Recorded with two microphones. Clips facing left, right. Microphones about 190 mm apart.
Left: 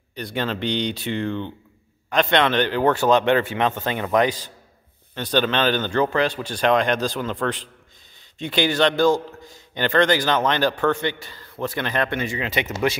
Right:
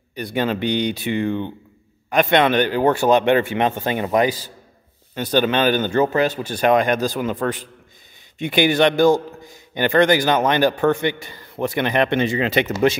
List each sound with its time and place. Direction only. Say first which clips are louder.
0.1 s a man's voice: right 4 dB; 10° right (ahead or behind)
6.2 s speech: right 3 dB; 45° right (ahead or behind)
6.5 s a man's voice: right 3 dB; 10° right (ahead or behind); by 12.4 s 25° right (ahead or behind)